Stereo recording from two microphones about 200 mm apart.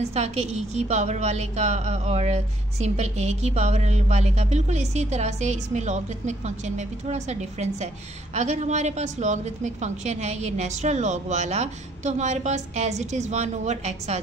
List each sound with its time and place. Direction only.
0.1 s a woman's voice: 30° right (ahead or behind)